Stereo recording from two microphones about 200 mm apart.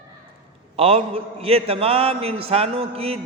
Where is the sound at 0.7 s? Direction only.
30° right (ahead or behind).